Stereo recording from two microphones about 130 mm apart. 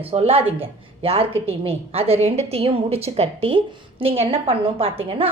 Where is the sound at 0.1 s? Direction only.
50° right (ahead or behind).